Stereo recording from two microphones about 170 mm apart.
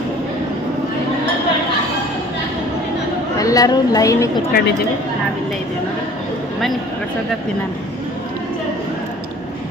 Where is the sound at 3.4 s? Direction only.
20° left (ahead or behind).